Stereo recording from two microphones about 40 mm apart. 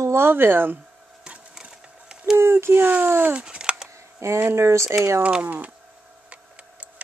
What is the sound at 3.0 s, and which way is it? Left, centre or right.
Speech, right.